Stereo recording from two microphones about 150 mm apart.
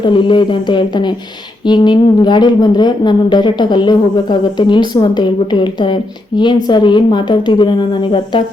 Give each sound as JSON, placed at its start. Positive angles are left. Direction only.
{"t": 0.0, "sound": "a woman's voice", "side_deg": 30}